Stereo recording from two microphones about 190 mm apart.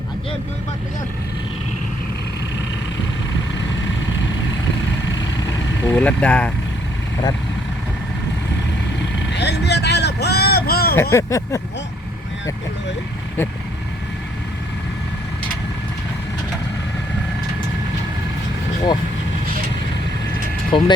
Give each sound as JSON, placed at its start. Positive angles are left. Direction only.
{"t": 5.8, "sound": "speech", "side_deg": 10}
{"t": 9.3, "sound": "vehicle", "side_deg": 60}
{"t": 11.1, "sound": "speech", "side_deg": 15}
{"t": 20.7, "sound": "speech", "side_deg": 25}